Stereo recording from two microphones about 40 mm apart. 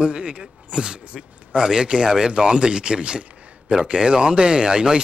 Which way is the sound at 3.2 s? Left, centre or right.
Right.